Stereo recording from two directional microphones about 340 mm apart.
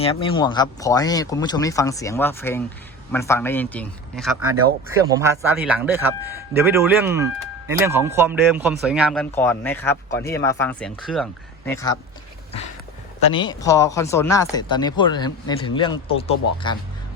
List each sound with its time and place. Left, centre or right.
0.0 s speech: centre
13.2 s speech: centre